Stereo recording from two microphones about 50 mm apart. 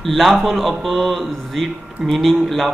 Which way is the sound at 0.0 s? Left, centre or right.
Centre.